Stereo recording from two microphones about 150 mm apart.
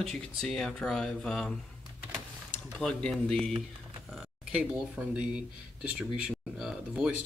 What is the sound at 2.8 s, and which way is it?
Speech, 5° left (ahead or behind).